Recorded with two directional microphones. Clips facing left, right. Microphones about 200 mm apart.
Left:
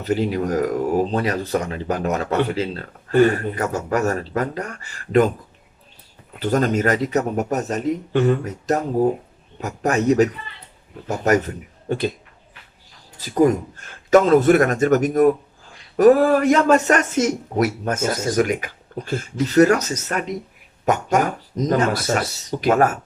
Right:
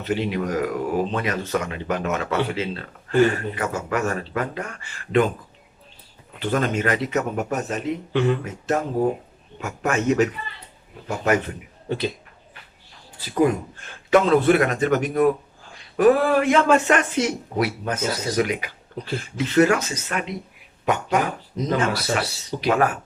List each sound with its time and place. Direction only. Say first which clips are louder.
0.0 s speech: left 3 dB; 40° left (ahead or behind)
6.4 s speech: left 4 dB; 40° left (ahead or behind)
11.9 s speech: left 3 dB; 45° left (ahead or behind)
13.1 s speech: left 3 dB; 40° left (ahead or behind)